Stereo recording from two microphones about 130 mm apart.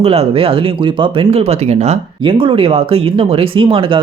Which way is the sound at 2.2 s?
40° right (ahead or behind).